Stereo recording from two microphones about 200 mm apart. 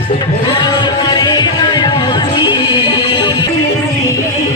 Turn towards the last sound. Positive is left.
turn(degrees=25)  # may be behind; listen again after turning